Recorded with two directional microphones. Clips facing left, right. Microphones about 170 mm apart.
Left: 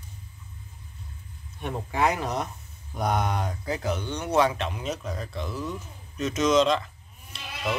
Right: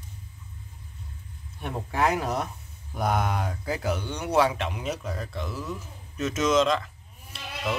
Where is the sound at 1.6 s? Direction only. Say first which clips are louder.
Even; 5° right (ahead or behind).